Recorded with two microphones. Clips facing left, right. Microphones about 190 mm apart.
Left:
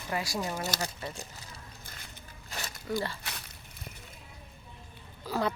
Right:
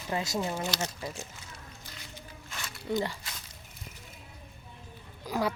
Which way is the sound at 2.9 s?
20° right (ahead or behind).